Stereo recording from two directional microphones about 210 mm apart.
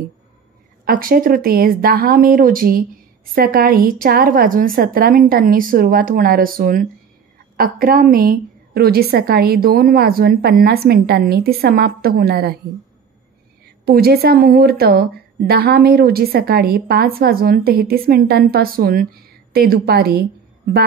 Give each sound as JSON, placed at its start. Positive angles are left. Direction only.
{"t": 0.8, "sound": "a woman's voice", "side_deg": -45}
{"t": 13.8, "sound": "a woman's voice", "side_deg": -45}